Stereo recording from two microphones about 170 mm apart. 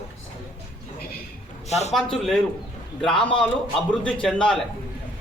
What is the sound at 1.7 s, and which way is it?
Speech, 40° left (ahead or behind).